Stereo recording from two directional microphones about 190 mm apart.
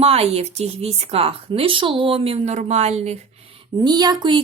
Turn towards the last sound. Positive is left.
turn(degrees=-25)  # may be behind; listen again after turning